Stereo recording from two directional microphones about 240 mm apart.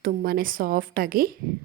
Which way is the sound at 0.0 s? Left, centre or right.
Right.